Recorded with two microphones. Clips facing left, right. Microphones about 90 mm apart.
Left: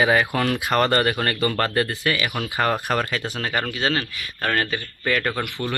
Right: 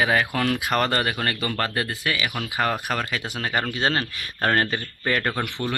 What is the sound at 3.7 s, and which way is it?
Speech, 35° right (ahead or behind).